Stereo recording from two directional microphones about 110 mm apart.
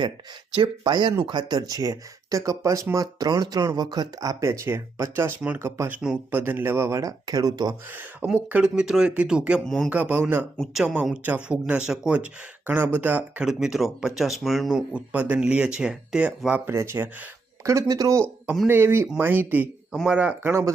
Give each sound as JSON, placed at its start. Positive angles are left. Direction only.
{"t": 0.5, "sound": "speech", "side_deg": -45}
{"t": 5.9, "sound": "speech", "side_deg": -10}
{"t": 7.9, "sound": "speech", "side_deg": -15}
{"t": 9.6, "sound": "speech", "side_deg": 5}
{"t": 9.9, "sound": "speech", "side_deg": -15}
{"t": 10.6, "sound": "speech", "side_deg": -5}
{"t": 13.5, "sound": "speech", "side_deg": -5}
{"t": 16.6, "sound": "speech", "side_deg": -20}
{"t": 18.7, "sound": "speech", "side_deg": -20}
{"t": 19.9, "sound": "speech", "side_deg": -5}
{"t": 20.5, "sound": "speech", "side_deg": -25}